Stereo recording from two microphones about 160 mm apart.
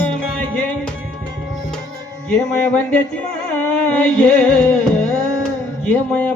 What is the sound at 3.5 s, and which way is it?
Music, 10° left (ahead or behind).